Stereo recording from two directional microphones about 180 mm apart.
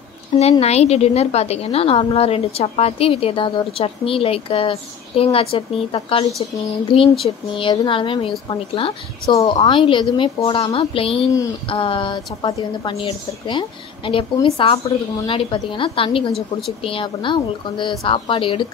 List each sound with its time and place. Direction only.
0.4 s a woman's voice: 35° left (ahead or behind)
16.3 s a woman's voice: centre (ahead or behind)
16.8 s a woman's voice: 30° left (ahead or behind)